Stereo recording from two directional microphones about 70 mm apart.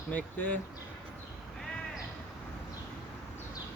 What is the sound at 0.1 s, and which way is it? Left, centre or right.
Speech, left.